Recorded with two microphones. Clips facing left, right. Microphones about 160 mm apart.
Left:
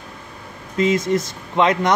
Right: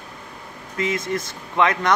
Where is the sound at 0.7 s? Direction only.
25° left (ahead or behind).